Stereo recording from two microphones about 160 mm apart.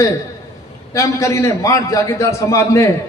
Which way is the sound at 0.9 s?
20° left (ahead or behind).